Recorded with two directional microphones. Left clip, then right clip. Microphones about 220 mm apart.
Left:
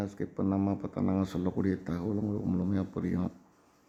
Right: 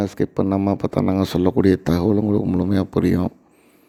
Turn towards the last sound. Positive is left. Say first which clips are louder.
# right 15 dB
turn(degrees=-40)  # may be behind; listen again after turning